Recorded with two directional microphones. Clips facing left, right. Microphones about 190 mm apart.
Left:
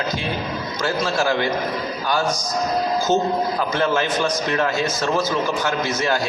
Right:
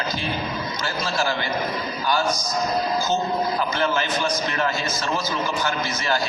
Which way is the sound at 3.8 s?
50° left (ahead or behind).